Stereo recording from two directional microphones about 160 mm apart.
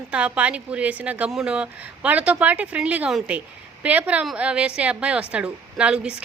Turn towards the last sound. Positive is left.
turn(degrees=-5)  # may be behind; listen again after turning